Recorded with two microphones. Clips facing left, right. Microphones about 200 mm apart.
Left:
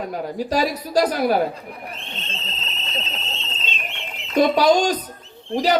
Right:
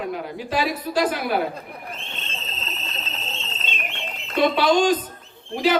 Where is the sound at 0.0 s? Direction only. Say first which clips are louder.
Left 3 dB; 40° left (ahead or behind).